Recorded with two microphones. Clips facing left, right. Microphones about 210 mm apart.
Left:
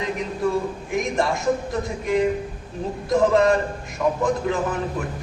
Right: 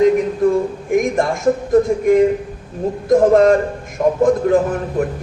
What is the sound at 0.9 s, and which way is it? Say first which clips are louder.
A man's voice: right 7 dB; 50° right (ahead or behind).